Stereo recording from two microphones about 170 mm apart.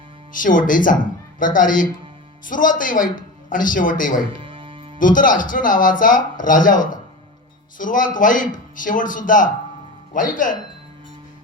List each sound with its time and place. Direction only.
0.3 s speech: 50° left (ahead or behind)
4.4 s music: 30° right (ahead or behind)
4.9 s speech: 50° left (ahead or behind)